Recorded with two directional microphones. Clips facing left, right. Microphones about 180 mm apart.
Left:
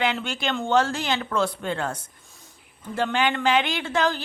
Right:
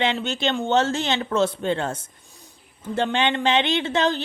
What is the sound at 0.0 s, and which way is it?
Speech, 25° right (ahead or behind).